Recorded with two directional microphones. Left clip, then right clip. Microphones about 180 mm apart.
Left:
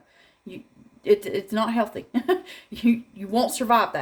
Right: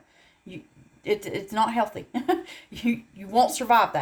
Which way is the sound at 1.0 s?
20° left (ahead or behind).